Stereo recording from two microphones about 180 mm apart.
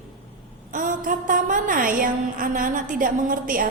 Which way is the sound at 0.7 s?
45° right (ahead or behind).